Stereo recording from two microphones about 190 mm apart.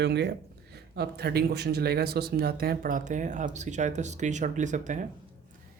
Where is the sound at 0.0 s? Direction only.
60° right (ahead or behind).